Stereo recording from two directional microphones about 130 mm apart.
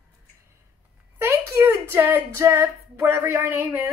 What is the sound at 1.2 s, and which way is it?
Speech, 20° right (ahead or behind).